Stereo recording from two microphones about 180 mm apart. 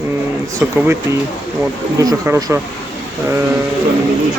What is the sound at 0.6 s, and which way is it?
Speech, 10° right (ahead or behind).